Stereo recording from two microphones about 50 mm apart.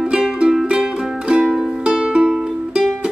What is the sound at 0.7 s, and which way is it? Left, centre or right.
Music, centre.